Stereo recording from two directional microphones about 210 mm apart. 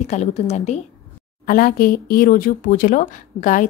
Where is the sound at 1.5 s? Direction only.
45° left (ahead or behind).